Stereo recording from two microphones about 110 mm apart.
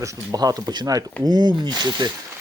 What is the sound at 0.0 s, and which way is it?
Speech, 35° right (ahead or behind).